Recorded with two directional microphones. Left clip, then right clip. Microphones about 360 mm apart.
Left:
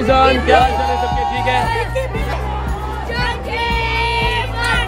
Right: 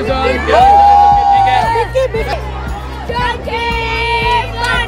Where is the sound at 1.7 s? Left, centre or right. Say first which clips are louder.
Right 6 dB; right.